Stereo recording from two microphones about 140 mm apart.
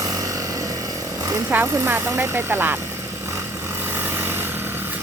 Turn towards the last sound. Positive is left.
turn(degrees=-15)  # may be behind; listen again after turning